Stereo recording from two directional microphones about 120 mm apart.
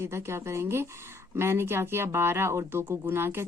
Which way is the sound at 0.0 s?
20° right (ahead or behind).